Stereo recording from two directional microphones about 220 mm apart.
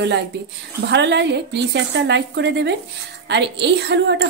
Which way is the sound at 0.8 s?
50° right (ahead or behind).